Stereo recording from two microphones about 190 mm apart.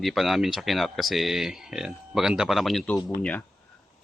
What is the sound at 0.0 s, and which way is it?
Speech, centre (ahead or behind).